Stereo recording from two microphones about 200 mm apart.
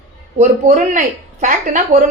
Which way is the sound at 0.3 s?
35° right (ahead or behind).